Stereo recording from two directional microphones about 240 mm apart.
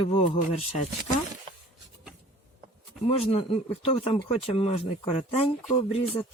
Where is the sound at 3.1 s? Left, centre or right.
Left.